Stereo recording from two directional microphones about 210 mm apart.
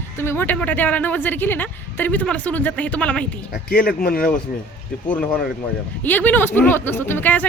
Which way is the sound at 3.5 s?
45° left (ahead or behind).